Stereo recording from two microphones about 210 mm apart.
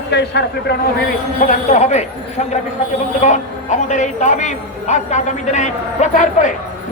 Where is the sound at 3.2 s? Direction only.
35° left (ahead or behind).